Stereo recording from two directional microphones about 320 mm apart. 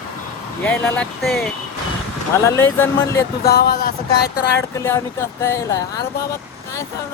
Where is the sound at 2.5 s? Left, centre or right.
Centre.